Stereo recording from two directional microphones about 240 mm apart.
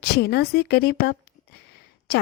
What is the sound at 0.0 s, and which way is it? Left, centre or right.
A woman's voice, left.